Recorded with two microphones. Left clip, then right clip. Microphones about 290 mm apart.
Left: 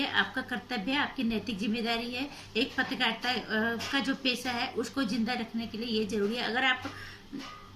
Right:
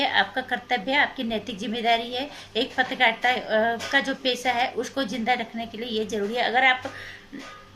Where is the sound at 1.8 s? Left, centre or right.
Centre.